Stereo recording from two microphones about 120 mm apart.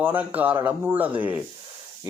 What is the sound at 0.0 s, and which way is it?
Speech, 15° right (ahead or behind).